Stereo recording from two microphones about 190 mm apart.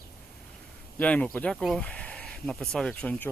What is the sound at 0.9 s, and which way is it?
Speech, 5° left (ahead or behind).